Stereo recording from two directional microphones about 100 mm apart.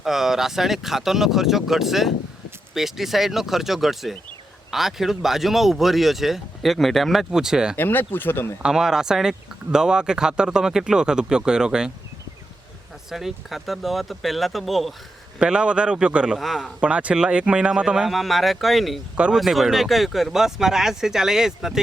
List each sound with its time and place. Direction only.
0.0 s speech: 5° right (ahead or behind)
7.8 s speech: 20° left (ahead or behind)
8.6 s speech: 5° right (ahead or behind)
13.1 s speech: 5° right (ahead or behind)
16.4 s speech: centre (ahead or behind)
16.8 s speech: 10° right (ahead or behind)
19.1 s speech: 10° right (ahead or behind)